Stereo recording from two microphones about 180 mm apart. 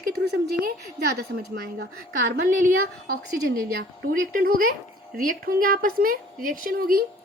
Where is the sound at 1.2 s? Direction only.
60° right (ahead or behind).